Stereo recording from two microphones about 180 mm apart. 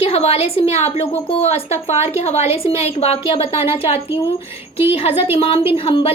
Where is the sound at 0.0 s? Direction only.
35° left (ahead or behind).